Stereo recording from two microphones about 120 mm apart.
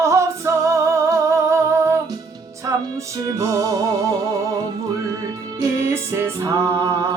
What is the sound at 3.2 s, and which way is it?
Music, 30° right (ahead or behind).